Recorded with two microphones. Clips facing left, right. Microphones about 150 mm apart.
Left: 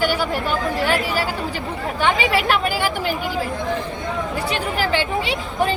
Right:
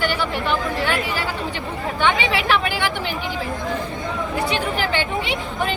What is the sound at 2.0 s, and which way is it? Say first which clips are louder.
Chatter: left 1 dB; 40° left (ahead or behind).